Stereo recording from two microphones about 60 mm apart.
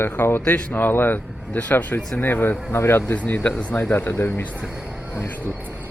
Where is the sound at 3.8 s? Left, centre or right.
Left.